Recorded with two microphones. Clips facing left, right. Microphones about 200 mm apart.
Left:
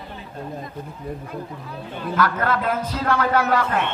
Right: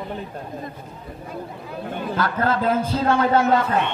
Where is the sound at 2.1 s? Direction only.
25° right (ahead or behind).